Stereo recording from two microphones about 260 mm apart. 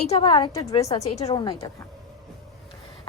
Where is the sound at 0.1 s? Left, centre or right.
Centre.